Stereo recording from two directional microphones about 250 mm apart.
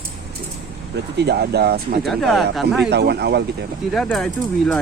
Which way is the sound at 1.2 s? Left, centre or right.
Right.